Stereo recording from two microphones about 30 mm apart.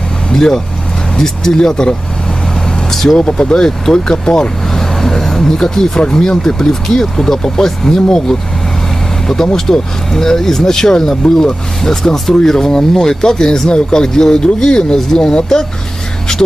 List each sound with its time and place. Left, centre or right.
0.3 s speech: centre
2.9 s speech: centre
3.2 s speech: left
4.6 s vehicle: centre
5.2 s speech: centre